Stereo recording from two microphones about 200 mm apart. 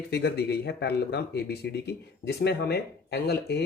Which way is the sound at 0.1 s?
55° left (ahead or behind).